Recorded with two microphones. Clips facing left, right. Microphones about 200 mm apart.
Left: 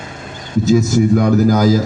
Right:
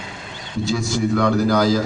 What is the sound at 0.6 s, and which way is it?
A man's voice, 45° left (ahead or behind).